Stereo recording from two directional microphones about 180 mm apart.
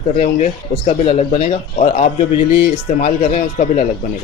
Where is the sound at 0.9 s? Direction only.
35° left (ahead or behind).